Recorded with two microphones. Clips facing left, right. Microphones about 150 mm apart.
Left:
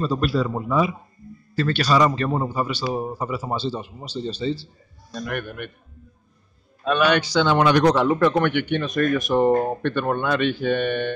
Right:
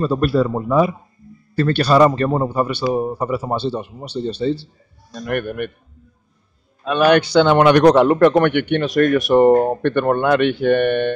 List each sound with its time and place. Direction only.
0.0 s a man's voice: 55° right (ahead or behind)
7.0 s a man's voice: 55° right (ahead or behind)